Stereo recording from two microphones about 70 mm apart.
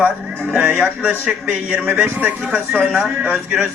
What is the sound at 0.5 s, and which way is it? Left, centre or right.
A man's voice, right.